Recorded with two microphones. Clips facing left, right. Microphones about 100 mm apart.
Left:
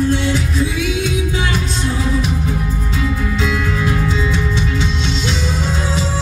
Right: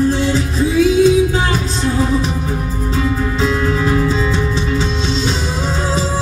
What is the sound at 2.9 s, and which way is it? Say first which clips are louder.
Music: right 4 dB; 35° right (ahead or behind).